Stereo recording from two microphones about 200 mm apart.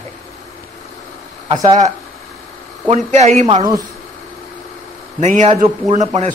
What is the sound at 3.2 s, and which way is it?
Speech, 35° right (ahead or behind).